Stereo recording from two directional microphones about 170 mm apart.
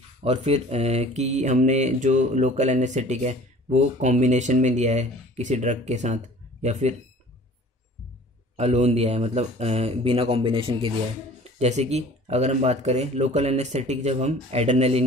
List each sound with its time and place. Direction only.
0.2 s speech: 35° right (ahead or behind)
8.5 s speech: 40° right (ahead or behind)